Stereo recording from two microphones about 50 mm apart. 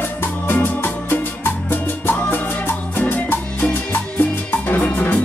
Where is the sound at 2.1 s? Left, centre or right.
Left.